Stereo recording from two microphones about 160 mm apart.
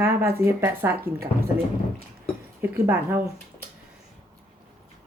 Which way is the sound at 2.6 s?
15° right (ahead or behind).